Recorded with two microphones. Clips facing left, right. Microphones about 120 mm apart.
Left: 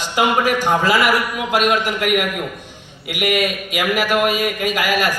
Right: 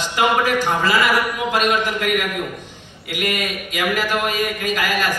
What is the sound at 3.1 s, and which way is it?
Speech, 15° left (ahead or behind).